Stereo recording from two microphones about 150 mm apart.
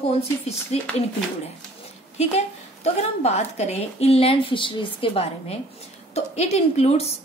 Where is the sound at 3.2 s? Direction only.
45° left (ahead or behind).